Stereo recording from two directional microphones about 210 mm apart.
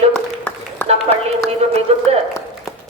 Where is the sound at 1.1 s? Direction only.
30° right (ahead or behind).